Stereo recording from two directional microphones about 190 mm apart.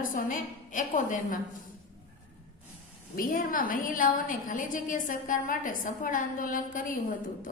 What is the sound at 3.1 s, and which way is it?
A woman's voice, 50° left (ahead or behind).